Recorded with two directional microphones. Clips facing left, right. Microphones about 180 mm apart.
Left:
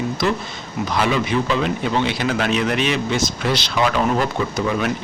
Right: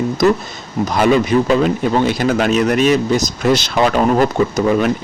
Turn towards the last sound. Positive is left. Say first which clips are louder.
# right 7 dB
turn(degrees=-45)  # may be behind; listen again after turning